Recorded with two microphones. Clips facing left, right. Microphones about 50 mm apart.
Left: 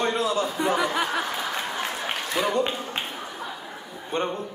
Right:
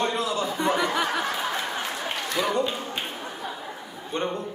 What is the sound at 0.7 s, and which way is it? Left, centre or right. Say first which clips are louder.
Snicker: even; centre.